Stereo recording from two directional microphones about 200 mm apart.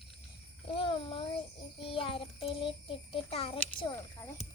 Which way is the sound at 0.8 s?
25° left (ahead or behind).